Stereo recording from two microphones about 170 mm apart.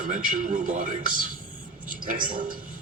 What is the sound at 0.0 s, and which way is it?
A man's voice, 55° right (ahead or behind).